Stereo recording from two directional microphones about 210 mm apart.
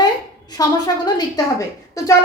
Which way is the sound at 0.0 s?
20° left (ahead or behind).